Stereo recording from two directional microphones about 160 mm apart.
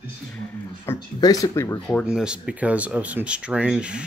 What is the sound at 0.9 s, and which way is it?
Speech, 25° left (ahead or behind).